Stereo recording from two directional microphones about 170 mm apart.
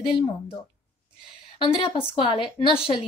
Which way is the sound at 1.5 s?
30° left (ahead or behind).